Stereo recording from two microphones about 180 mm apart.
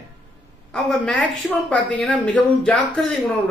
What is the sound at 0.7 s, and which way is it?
Speech, 5° left (ahead or behind).